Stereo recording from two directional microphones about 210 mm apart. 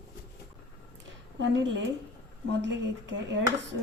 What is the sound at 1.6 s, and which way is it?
Speech, 60° right (ahead or behind).